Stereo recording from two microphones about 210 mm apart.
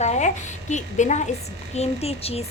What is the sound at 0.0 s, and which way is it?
A woman's voice, 35° left (ahead or behind).